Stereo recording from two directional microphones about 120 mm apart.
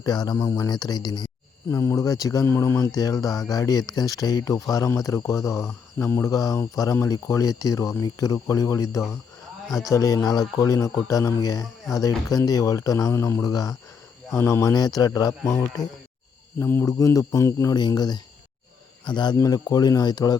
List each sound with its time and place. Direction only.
0.0 s speech: 35° left (ahead or behind)
1.7 s speech: 25° left (ahead or behind)
9.6 s speech: centre (ahead or behind)
9.9 s speech: 25° left (ahead or behind)
15.8 s speech: centre (ahead or behind)
16.6 s speech: 20° left (ahead or behind)